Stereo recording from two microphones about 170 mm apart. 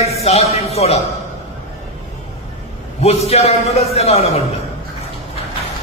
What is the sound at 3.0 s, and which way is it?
Speech, 35° left (ahead or behind).